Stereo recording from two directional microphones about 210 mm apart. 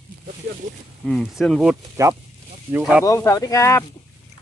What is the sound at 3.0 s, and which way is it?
Speech, 15° left (ahead or behind).